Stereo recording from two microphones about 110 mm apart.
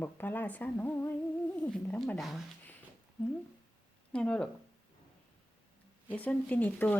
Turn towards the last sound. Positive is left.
turn(degrees=15)  # may be behind; listen again after turning